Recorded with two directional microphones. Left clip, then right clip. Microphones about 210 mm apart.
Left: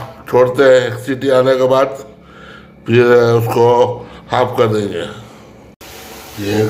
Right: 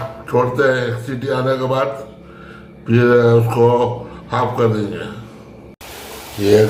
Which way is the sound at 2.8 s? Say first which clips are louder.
Left 3 dB; 50° left (ahead or behind).